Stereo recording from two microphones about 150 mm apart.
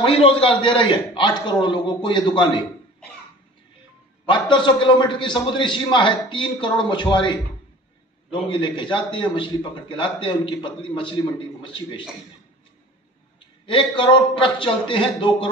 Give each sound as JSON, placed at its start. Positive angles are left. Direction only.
{"t": 0.0, "sound": "a man's voice", "side_deg": 40}
{"t": 4.3, "sound": "a man's voice", "side_deg": 30}
{"t": 13.7, "sound": "a man's voice", "side_deg": 35}